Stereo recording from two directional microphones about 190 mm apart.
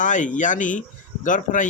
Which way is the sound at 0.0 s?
40° left (ahead or behind).